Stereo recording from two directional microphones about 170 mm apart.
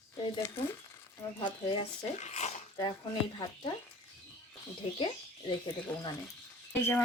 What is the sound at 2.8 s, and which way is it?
Speech, 25° left (ahead or behind).